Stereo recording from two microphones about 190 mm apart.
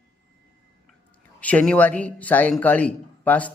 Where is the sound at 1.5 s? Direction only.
5° left (ahead or behind).